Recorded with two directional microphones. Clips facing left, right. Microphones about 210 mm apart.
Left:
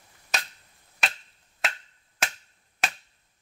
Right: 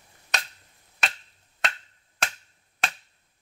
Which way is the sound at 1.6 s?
5° left (ahead or behind).